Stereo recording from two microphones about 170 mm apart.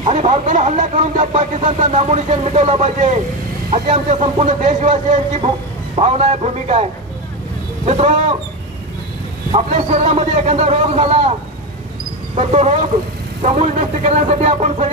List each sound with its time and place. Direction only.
0.0 s speech: 40° right (ahead or behind)
9.7 s speech: 45° right (ahead or behind)
12.4 s speech: 45° right (ahead or behind)